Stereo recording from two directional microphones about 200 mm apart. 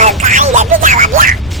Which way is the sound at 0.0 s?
40° right (ahead or behind).